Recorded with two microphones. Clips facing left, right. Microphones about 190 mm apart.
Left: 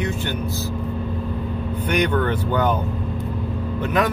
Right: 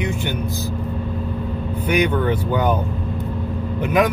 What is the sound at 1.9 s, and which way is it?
Speech, 10° right (ahead or behind).